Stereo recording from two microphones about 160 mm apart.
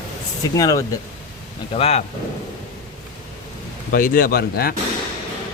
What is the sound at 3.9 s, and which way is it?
Speech, 60° left (ahead or behind).